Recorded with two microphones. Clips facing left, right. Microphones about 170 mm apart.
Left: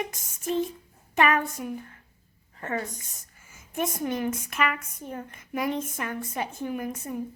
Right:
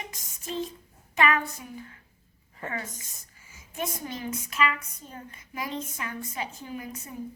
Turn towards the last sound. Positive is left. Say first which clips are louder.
# left 6 dB
turn(degrees=55)  # may be behind; listen again after turning